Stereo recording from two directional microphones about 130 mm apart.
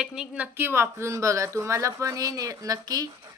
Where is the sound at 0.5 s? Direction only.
20° right (ahead or behind).